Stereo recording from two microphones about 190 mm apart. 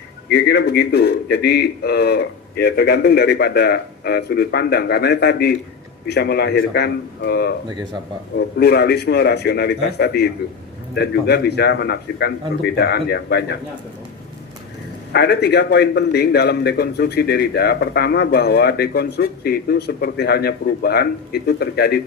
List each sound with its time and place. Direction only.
0.3 s a man's voice: 60° left (ahead or behind)
15.1 s a man's voice: 60° left (ahead or behind)